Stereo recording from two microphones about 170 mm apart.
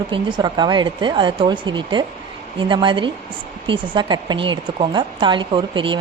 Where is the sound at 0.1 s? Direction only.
30° right (ahead or behind).